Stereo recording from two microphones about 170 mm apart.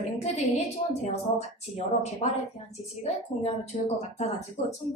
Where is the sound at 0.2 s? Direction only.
40° left (ahead or behind).